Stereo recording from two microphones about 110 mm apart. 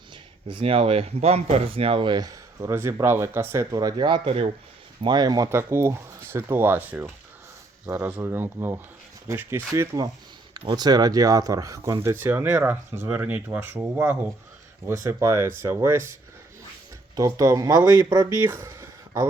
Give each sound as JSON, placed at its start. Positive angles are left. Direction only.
{"t": 0.4, "sound": "speech", "side_deg": -55}
{"t": 5.0, "sound": "speech", "side_deg": -40}
{"t": 5.5, "sound": "speech", "side_deg": -25}
{"t": 10.7, "sound": "speech", "side_deg": -40}
{"t": 12.1, "sound": "speech", "side_deg": -20}
{"t": 17.2, "sound": "speech", "side_deg": -30}
{"t": 17.8, "sound": "speech", "side_deg": -20}